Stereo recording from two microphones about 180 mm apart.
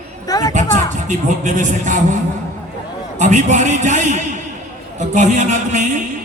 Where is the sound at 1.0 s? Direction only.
45° right (ahead or behind).